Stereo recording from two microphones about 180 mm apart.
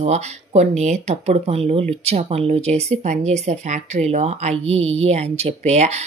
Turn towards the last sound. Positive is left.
turn(degrees=-40)  # may be behind; listen again after turning